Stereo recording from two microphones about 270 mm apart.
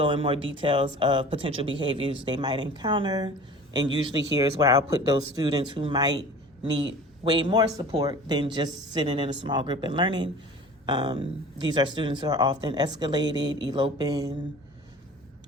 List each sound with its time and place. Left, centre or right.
0.0 s speech: centre